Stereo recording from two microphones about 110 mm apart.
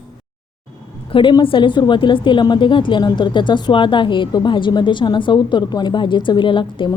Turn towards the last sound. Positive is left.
turn(degrees=50)  # may be behind; listen again after turning